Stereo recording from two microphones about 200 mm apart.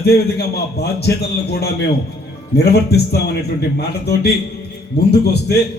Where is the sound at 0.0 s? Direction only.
55° left (ahead or behind).